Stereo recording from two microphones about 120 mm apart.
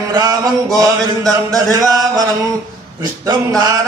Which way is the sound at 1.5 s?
30° right (ahead or behind).